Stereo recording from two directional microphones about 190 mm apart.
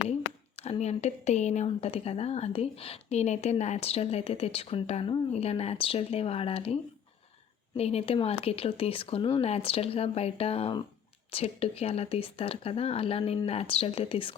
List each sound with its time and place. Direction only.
0.1 s a woman's voice: 35° left (ahead or behind)
7.8 s a woman's voice: 30° left (ahead or behind)